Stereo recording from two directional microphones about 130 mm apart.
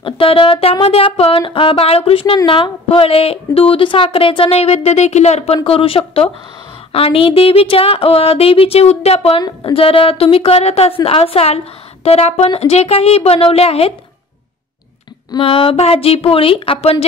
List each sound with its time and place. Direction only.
0.0 s a woman's voice: 45° left (ahead or behind)
9.4 s speech: 30° left (ahead or behind)
9.8 s a woman's voice: 45° left (ahead or behind)
15.3 s a woman's voice: 45° left (ahead or behind)